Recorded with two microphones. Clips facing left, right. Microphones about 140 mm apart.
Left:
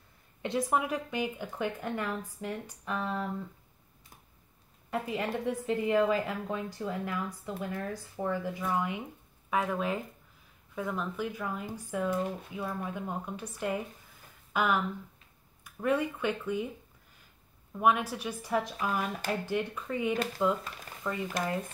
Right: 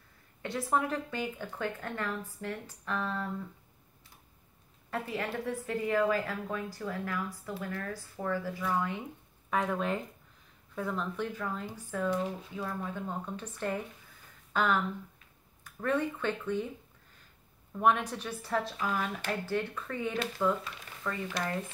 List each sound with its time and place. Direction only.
0.4 s speech: 20° left (ahead or behind)
4.9 s a woman's voice: 15° left (ahead or behind)
9.5 s speech: 5° left (ahead or behind)
17.7 s a woman's voice: 5° left (ahead or behind)